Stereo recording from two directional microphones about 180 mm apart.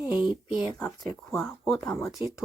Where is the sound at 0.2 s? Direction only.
25° left (ahead or behind).